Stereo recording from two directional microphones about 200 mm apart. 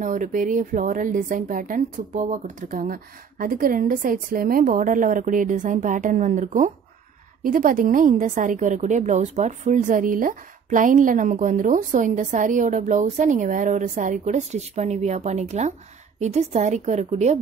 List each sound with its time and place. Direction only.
0.0 s a woman's voice: 40° right (ahead or behind)